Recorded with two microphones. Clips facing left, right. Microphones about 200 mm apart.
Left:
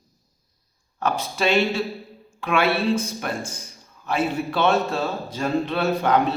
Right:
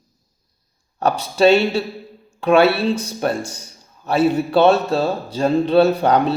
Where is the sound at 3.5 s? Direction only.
35° right (ahead or behind).